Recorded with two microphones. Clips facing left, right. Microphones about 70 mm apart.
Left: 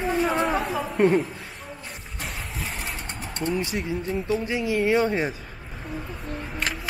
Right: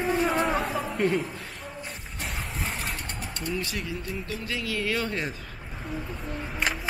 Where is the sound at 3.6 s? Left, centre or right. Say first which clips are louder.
Left 5 dB; left.